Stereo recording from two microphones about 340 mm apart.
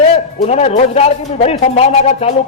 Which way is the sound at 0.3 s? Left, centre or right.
Centre.